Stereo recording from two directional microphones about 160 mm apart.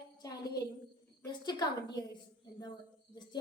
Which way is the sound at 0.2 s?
25° left (ahead or behind).